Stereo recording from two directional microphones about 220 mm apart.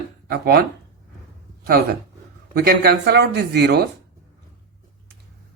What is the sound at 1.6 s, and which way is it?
Speech, 45° right (ahead or behind).